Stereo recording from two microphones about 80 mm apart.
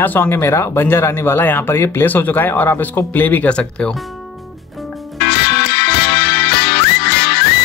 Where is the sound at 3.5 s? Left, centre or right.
Centre.